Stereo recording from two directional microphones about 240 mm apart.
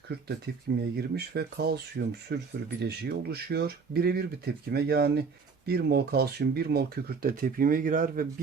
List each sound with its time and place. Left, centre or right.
0.9 s speech: right